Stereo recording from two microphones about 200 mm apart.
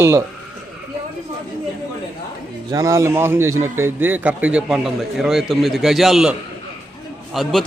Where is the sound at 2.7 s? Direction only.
15° right (ahead or behind).